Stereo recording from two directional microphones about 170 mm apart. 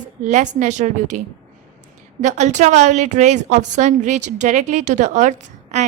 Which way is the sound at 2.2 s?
45° right (ahead or behind).